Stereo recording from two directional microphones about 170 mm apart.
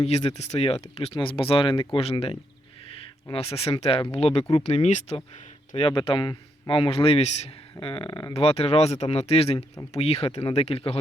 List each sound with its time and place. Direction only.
0.0 s a man's voice: 35° left (ahead or behind)